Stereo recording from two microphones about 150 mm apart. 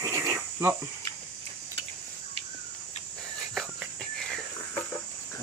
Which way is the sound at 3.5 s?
Centre (ahead or behind).